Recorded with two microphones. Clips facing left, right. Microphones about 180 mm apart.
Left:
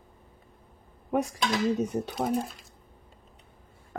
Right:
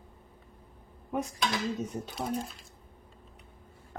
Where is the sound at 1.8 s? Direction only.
65° left (ahead or behind).